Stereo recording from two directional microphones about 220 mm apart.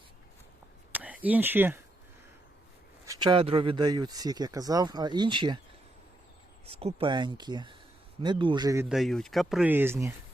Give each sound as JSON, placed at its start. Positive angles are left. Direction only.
{"t": 0.9, "sound": "speech", "side_deg": -5}
{"t": 3.1, "sound": "speech", "side_deg": -20}
{"t": 6.7, "sound": "speech", "side_deg": -25}
{"t": 8.9, "sound": "speech", "side_deg": 0}